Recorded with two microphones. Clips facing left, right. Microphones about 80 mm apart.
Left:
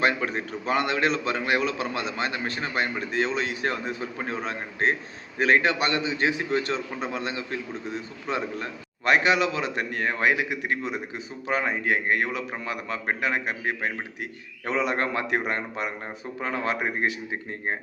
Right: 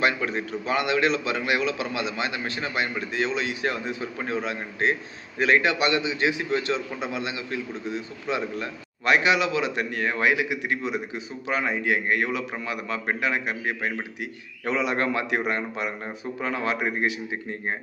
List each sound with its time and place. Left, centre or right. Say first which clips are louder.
0.0 s a man's voice: even; left